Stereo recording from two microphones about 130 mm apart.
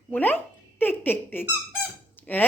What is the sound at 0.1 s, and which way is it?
Speech, 15° left (ahead or behind).